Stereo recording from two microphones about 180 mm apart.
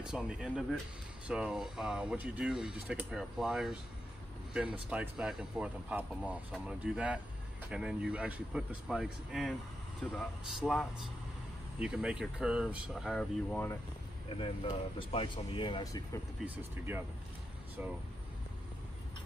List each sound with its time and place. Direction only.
0.0 s speech: 5° right (ahead or behind)
14.3 s speech: 30° left (ahead or behind)
16.4 s speech: 10° right (ahead or behind)